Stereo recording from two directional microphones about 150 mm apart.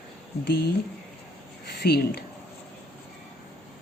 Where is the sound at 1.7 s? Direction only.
90° left.